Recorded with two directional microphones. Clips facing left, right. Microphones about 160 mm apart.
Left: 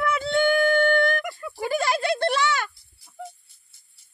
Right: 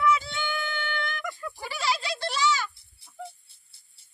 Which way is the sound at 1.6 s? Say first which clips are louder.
Left 7 dB; 50° left (ahead or behind).